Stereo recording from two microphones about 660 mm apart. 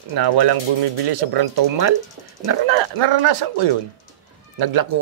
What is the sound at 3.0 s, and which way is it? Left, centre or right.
Speech, right.